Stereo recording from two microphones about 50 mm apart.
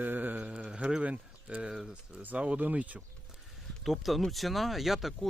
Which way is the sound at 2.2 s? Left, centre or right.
Right.